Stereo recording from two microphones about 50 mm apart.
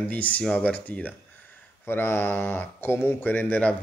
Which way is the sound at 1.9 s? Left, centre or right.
Left.